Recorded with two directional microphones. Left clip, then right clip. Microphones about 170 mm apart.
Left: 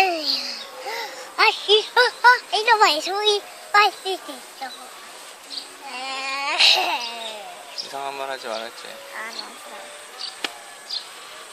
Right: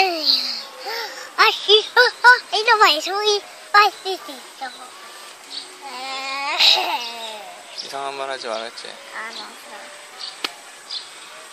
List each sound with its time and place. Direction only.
0.0 s a sound: 5° right (ahead or behind)
5.9 s babbling: centre (ahead or behind)
7.9 s speech: 30° right (ahead or behind)